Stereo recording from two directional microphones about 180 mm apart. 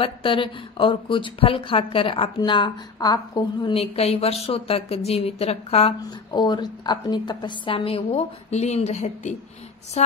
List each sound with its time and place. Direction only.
0.0 s a woman's voice: 30° left (ahead or behind)
6.0 s a woman's voice: 20° left (ahead or behind); by 10.1 s 40° left (ahead or behind)